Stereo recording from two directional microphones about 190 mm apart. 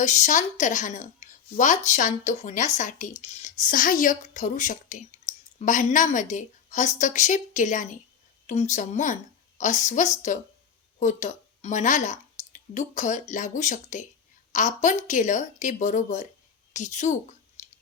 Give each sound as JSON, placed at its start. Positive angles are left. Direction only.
{"t": 0.0, "sound": "speech", "side_deg": 40}
{"t": 17.6, "sound": "chewing", "side_deg": 40}